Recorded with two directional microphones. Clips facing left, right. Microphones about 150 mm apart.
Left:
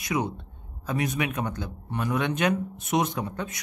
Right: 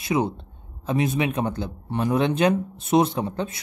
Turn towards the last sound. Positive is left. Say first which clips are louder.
# right 5 dB
turn(degrees=-30)  # may be behind; listen again after turning